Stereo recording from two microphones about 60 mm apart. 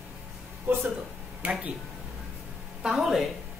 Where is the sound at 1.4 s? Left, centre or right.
Right.